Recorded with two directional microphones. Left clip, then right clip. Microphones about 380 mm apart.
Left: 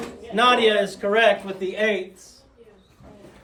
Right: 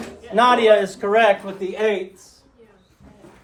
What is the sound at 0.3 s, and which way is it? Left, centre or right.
A man's voice, centre.